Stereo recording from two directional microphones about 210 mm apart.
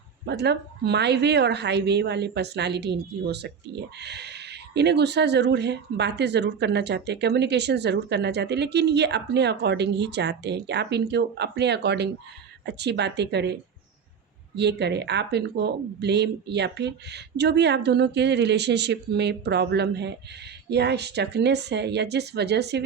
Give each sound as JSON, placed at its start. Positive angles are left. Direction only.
{"t": 0.3, "sound": "a woman's voice", "side_deg": -50}